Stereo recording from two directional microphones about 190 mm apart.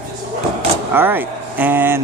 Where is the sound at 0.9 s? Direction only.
10° right (ahead or behind).